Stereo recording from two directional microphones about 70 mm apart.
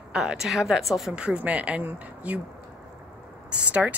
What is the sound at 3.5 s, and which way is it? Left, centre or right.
Speech, centre.